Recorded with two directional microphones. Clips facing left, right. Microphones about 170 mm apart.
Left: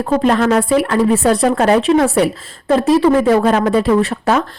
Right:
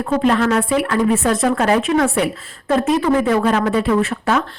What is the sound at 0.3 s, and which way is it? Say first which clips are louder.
Speech: left 3 dB; 40° left (ahead or behind).